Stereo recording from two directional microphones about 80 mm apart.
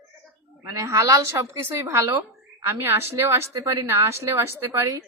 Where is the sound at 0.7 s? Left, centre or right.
Right.